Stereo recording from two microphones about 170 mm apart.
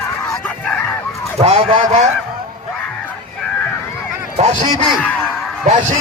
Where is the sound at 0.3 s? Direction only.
5° left (ahead or behind).